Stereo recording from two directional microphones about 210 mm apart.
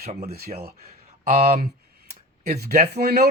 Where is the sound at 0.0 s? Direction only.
35° right (ahead or behind).